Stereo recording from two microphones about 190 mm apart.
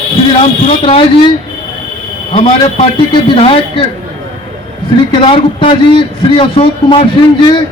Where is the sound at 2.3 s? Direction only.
35° left (ahead or behind).